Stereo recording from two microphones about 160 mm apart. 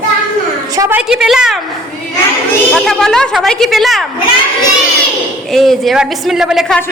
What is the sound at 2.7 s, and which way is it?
A woman's voice, 5° left (ahead or behind).